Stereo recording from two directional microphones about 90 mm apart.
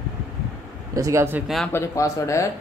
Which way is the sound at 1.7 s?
35° left (ahead or behind).